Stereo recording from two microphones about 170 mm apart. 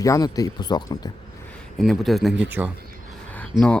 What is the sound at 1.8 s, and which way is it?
Speech, centre (ahead or behind).